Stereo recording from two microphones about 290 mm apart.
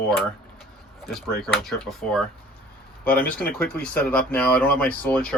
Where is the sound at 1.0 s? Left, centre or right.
Centre.